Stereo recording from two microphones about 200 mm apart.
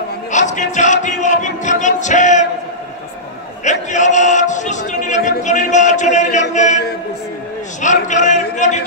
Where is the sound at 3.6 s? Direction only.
35° left (ahead or behind).